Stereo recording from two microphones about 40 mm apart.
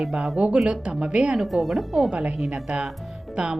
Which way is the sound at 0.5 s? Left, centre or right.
Right.